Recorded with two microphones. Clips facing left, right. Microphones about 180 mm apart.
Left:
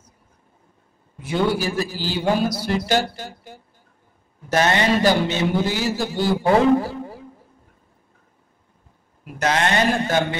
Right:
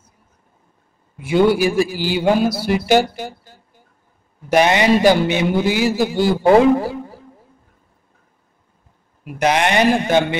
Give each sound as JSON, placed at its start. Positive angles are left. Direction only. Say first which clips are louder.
{"t": 1.1, "sound": "a man's voice", "louder": "right 7 dB", "side_deg": -10}
{"t": 4.5, "sound": "a man's voice", "louder": "right 5 dB", "side_deg": -15}
{"t": 9.2, "sound": "a man's voice", "louder": "right 4 dB", "side_deg": -15}